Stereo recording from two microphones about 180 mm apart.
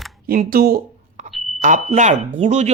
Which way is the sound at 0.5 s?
55° right (ahead or behind).